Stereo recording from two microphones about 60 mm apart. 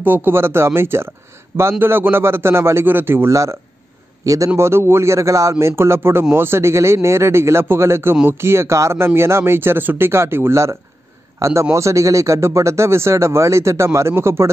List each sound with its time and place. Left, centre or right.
0.0 s a man's voice: right
3.3 s speech: right
4.6 s a man's voice: right